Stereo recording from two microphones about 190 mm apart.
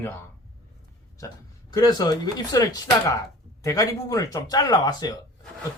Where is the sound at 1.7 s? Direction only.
20° left (ahead or behind).